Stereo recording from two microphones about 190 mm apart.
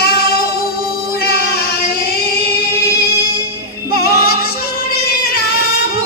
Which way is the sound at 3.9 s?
55° left (ahead or behind).